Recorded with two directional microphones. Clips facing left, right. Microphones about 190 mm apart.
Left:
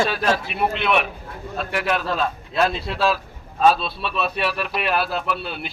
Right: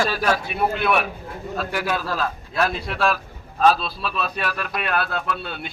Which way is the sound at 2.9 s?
Centre (ahead or behind).